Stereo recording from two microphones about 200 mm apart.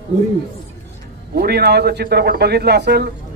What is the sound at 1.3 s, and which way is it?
A man's voice, 55° right (ahead or behind).